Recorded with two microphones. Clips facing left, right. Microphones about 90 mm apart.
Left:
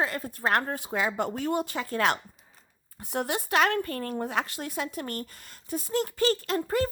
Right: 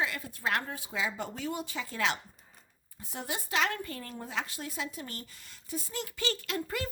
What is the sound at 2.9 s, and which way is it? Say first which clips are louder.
Speech: left 8 dB; 65° left (ahead or behind).